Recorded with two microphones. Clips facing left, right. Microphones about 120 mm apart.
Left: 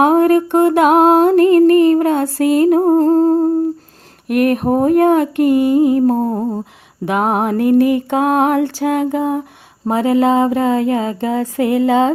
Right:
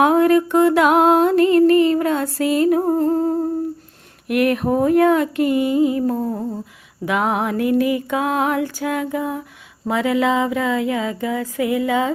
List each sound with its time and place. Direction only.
0.0 s music: 45° left (ahead or behind)
0.8 s music: 40° left (ahead or behind); by 9.4 s 60° left (ahead or behind)
9.8 s music: 40° left (ahead or behind); by 12.1 s 60° left (ahead or behind)